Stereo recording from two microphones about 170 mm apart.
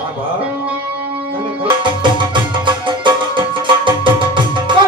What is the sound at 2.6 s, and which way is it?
Music, 30° right (ahead or behind).